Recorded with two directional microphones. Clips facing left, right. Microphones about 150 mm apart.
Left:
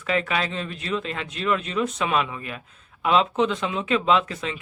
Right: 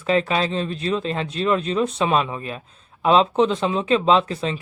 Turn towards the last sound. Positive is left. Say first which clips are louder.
# right 4 dB
turn(degrees=-30)  # may be behind; listen again after turning